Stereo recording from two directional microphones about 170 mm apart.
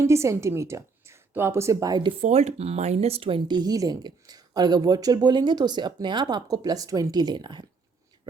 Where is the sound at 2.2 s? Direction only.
40° right (ahead or behind).